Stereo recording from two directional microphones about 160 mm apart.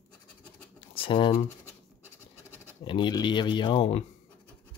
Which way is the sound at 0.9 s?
35° left (ahead or behind).